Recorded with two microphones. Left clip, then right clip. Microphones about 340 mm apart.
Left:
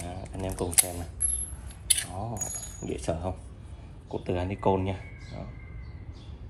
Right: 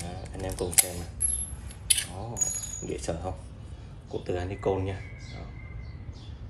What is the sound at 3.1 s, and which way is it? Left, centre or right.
Speech, centre.